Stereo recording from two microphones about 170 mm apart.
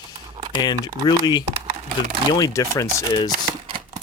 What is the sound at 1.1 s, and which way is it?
Speech, 25° left (ahead or behind).